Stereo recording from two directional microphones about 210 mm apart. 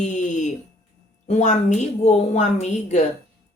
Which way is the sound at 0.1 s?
35° left (ahead or behind).